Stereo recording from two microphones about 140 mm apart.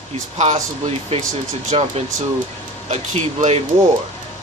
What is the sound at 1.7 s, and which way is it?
Speech, 50° right (ahead or behind).